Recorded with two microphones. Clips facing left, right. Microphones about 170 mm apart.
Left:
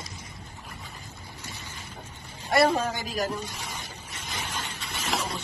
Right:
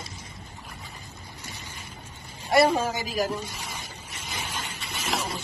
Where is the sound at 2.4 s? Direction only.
10° right (ahead or behind).